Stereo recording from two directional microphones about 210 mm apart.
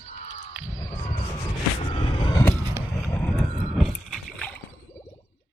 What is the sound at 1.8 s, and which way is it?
Vehicle, 25° left (ahead or behind).